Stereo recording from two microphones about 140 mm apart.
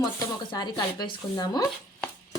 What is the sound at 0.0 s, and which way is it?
Speech, 25° left (ahead or behind).